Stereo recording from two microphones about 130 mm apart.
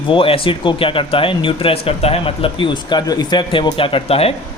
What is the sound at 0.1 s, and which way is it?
A man's voice, 45° left (ahead or behind).